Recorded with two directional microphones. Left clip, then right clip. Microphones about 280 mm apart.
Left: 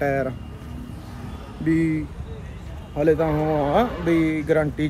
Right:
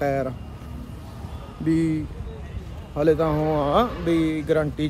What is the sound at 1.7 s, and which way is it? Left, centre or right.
Speech, centre.